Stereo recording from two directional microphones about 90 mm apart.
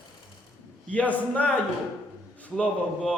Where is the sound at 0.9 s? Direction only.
15° left (ahead or behind).